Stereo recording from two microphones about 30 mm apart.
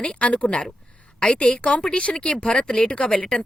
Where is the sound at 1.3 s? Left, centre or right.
Left.